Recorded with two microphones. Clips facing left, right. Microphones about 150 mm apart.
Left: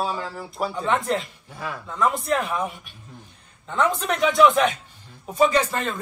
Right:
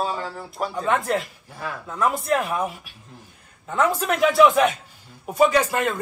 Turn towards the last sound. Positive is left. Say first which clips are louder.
# right 2 dB
turn(degrees=-10)  # may be behind; listen again after turning